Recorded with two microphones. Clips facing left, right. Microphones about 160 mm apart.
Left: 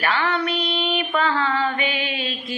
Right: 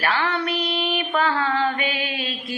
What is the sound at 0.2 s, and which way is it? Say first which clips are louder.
Female singing: left 1 dB; 45° right (ahead or behind).